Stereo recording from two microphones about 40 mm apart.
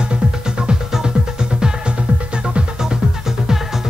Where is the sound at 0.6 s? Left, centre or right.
Right.